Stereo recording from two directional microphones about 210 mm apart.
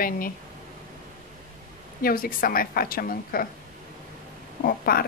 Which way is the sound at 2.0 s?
45° left (ahead or behind).